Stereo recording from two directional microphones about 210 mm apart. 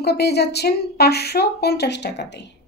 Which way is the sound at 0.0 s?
50° left (ahead or behind).